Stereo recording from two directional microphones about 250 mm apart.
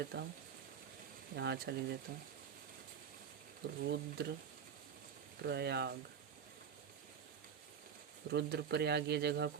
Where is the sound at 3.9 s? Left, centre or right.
Right.